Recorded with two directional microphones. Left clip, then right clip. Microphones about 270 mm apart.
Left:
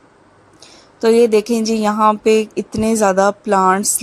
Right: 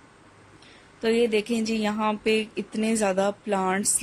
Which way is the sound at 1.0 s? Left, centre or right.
Left.